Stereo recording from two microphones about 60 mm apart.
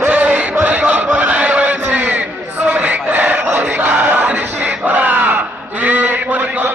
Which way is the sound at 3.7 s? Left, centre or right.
Right.